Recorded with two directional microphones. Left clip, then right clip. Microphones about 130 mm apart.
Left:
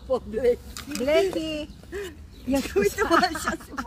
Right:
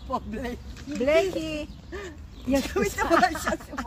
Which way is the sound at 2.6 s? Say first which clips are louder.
Left 3 dB; 35° right (ahead or behind).